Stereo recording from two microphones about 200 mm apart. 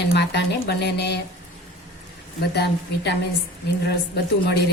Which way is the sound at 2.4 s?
55° left (ahead or behind).